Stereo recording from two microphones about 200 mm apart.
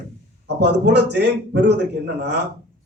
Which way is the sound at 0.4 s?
60° right (ahead or behind).